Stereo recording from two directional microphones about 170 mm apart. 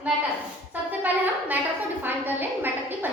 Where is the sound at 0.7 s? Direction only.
10° right (ahead or behind).